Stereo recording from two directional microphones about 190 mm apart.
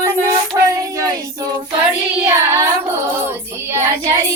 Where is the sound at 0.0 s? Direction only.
15° right (ahead or behind).